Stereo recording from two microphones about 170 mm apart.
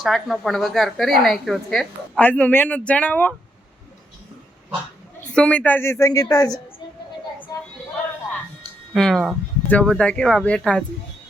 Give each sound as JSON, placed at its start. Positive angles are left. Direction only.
{"t": 0.0, "sound": "a woman's voice", "side_deg": 0}
{"t": 5.3, "sound": "a woman's voice", "side_deg": 5}
{"t": 8.9, "sound": "speech", "side_deg": 0}